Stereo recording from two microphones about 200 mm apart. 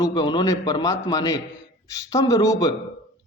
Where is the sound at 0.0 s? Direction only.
20° left (ahead or behind).